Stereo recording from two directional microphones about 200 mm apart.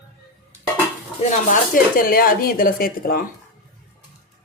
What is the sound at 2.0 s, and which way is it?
Speech, 45° left (ahead or behind).